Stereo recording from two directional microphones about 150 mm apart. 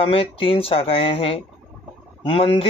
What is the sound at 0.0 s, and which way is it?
Speech, 40° left (ahead or behind).